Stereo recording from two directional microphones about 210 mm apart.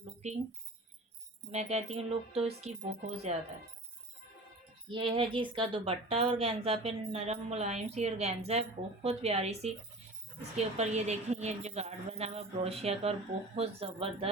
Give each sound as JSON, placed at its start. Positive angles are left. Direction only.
{"t": 1.5, "sound": "a woman's voice", "side_deg": -30}
{"t": 4.9, "sound": "a woman's voice", "side_deg": -25}